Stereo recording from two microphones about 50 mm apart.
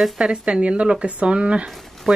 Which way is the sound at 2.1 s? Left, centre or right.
Centre.